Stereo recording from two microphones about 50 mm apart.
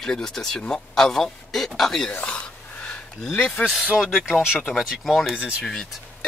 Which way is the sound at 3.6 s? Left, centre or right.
Centre.